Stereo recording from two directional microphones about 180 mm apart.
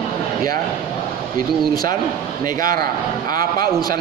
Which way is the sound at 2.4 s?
50° right (ahead or behind).